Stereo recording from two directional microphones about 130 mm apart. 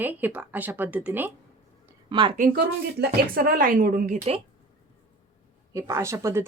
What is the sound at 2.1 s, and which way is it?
Speech, 35° right (ahead or behind).